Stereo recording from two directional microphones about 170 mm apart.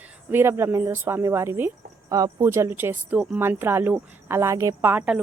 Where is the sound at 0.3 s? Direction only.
15° right (ahead or behind).